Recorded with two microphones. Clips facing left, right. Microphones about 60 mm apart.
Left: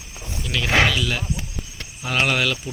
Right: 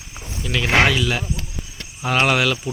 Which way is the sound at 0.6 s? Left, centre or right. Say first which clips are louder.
Right 2 dB; centre.